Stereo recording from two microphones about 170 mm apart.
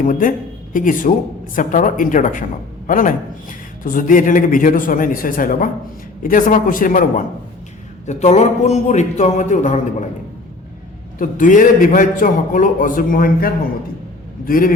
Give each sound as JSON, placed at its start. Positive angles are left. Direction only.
{"t": 0.0, "sound": "a man's voice", "side_deg": 50}
{"t": 8.0, "sound": "a man's voice", "side_deg": 45}
{"t": 11.2, "sound": "a man's voice", "side_deg": 50}